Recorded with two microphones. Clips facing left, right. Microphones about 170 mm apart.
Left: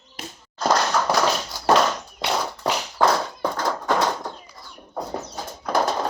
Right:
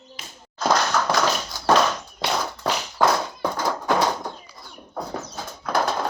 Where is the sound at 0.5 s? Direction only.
Centre (ahead or behind).